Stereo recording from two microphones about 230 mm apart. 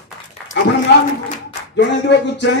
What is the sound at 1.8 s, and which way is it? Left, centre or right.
Speech, left.